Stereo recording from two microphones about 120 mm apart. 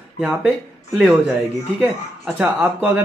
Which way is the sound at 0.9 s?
10° right (ahead or behind).